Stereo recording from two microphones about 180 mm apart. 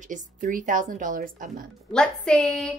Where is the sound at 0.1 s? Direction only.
50° right (ahead or behind).